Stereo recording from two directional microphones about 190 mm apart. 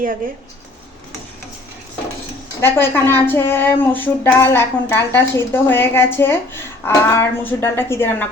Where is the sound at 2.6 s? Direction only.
10° left (ahead or behind).